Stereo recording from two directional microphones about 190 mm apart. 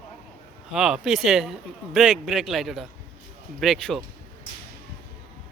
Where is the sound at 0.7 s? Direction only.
5° right (ahead or behind).